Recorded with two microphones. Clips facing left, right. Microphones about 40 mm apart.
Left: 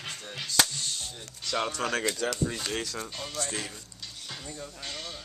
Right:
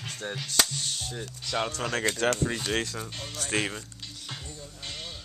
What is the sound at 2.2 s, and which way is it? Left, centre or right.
Speech, right.